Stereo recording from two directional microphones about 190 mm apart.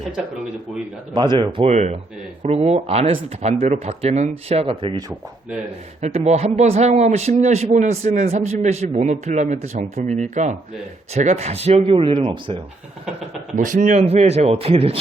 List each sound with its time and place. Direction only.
1.1 s a man's voice: 25° right (ahead or behind)
6.0 s a man's voice: 35° right (ahead or behind)
13.6 s a man's voice: 40° right (ahead or behind)